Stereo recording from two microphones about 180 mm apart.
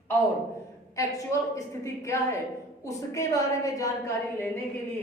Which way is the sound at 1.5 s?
15° left (ahead or behind).